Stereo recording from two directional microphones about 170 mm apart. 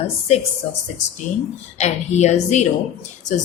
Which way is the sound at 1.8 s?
40° left (ahead or behind).